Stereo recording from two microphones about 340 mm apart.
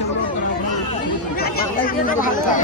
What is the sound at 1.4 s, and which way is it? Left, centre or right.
Speech, left.